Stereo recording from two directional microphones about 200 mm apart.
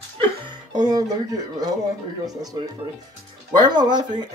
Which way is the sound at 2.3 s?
20° right (ahead or behind).